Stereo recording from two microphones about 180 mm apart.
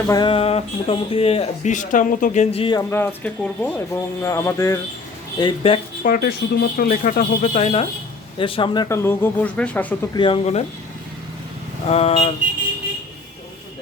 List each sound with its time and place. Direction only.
0.1 s speech: 25° left (ahead or behind)
2.9 s speech: 10° left (ahead or behind)
5.4 s speech: 25° left (ahead or behind)
6.0 s speech: 55° left (ahead or behind); by 9.8 s 10° left (ahead or behind)
10.2 s speech: 30° left (ahead or behind)
11.9 s speech: 35° left (ahead or behind)